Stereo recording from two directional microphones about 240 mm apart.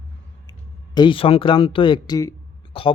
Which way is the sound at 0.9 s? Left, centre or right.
Centre.